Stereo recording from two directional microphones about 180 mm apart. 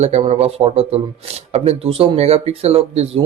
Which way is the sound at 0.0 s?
35° right (ahead or behind).